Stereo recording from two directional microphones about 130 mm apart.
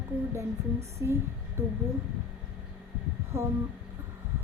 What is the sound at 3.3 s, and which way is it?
Speech, 25° right (ahead or behind).